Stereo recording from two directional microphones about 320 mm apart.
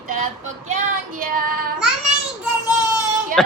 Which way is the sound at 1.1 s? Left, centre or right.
Right.